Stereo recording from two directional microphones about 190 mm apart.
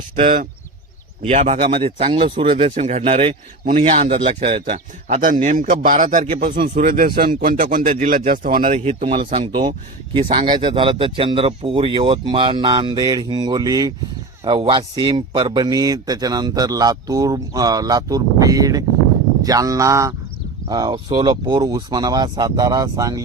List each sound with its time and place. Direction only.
0.2 s speech: 35° right (ahead or behind); by 23.2 s 20° right (ahead or behind)